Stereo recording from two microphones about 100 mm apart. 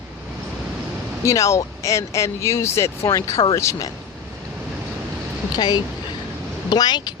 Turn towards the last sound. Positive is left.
turn(degrees=45)  # may be behind; listen again after turning